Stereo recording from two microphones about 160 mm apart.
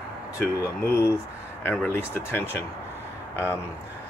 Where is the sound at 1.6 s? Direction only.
10° left (ahead or behind).